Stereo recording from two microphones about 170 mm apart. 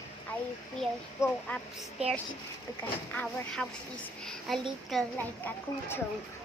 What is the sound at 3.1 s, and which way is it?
Speech, 5° left (ahead or behind).